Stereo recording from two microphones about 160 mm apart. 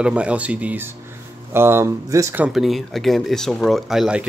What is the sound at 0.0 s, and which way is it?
Speech, 5° right (ahead or behind).